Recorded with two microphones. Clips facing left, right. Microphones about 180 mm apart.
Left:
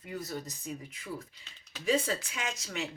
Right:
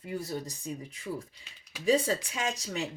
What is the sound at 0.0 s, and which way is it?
A woman's voice, 30° right (ahead or behind).